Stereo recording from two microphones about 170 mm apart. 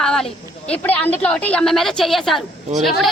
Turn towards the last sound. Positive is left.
turn(degrees=0)  # may be behind; listen again after turning